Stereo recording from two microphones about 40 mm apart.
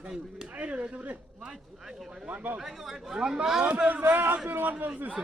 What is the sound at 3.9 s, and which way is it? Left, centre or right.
A man's voice, right.